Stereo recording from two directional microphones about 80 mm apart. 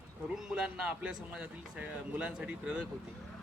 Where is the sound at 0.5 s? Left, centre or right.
Centre.